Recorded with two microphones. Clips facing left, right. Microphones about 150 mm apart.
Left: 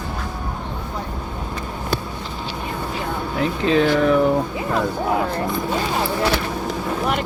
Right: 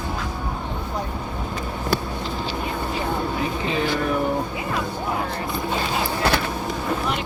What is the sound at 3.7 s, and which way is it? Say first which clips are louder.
Speech: left 9 dB; 90° left.